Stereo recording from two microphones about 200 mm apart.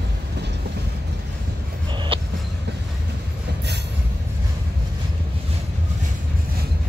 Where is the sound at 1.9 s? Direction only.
25° right (ahead or behind).